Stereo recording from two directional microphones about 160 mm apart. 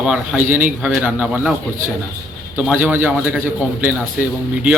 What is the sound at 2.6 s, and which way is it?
Speech, 10° right (ahead or behind).